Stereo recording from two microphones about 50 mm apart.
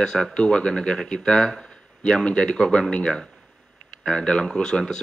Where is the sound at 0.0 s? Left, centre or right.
Centre.